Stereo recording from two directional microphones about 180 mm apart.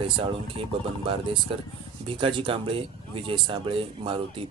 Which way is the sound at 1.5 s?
30° right (ahead or behind).